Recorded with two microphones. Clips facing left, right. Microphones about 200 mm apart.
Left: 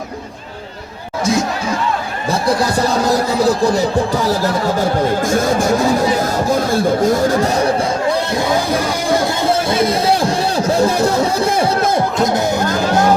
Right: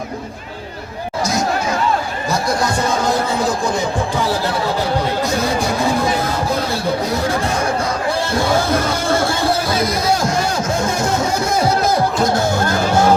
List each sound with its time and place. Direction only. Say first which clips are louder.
2.3 s speech: left 3 dB; 35° left (ahead or behind)
8.3 s speech: even; 20° left (ahead or behind)
12.1 s speech: left 1 dB; 20° left (ahead or behind)